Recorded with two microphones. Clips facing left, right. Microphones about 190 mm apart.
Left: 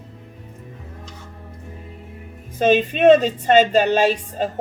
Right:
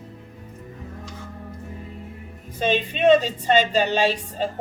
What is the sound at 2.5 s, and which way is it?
Speech, 50° left (ahead or behind).